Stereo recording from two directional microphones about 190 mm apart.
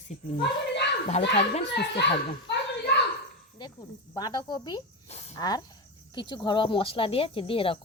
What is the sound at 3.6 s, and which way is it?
Speech, 20° left (ahead or behind).